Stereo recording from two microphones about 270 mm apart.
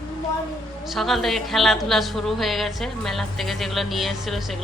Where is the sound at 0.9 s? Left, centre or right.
Centre.